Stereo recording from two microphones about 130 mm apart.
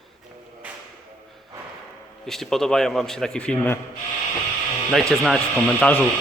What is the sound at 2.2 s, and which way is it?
A man's voice, 5° left (ahead or behind).